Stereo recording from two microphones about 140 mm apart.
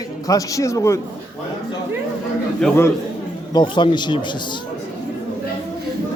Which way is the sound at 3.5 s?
30° left (ahead or behind).